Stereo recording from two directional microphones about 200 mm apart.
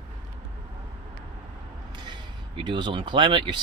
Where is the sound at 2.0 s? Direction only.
20° right (ahead or behind).